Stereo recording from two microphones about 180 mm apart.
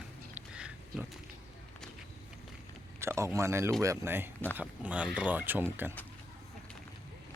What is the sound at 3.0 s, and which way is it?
Speech, 15° right (ahead or behind).